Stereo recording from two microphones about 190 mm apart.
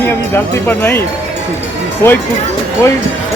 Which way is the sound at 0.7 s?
10° left (ahead or behind).